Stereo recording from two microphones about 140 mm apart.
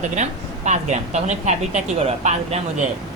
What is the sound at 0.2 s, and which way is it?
Speech, 55° right (ahead or behind).